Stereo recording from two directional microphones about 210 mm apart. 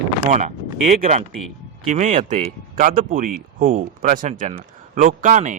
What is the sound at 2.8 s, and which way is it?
Speech, 40° right (ahead or behind).